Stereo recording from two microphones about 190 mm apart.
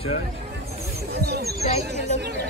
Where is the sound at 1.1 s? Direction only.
55° right (ahead or behind).